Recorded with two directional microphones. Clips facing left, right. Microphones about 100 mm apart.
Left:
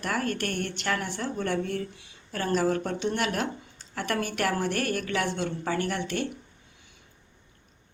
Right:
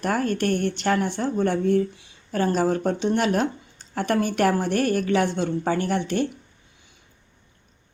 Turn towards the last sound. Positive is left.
turn(degrees=-25)  # may be behind; listen again after turning